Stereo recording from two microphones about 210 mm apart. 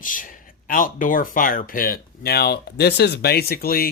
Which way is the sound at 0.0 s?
40° left (ahead or behind).